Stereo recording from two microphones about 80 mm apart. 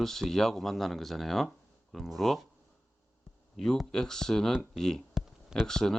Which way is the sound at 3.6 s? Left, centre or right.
Centre.